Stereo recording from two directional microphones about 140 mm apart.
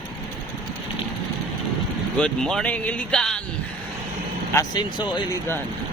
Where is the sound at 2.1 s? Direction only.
5° left (ahead or behind).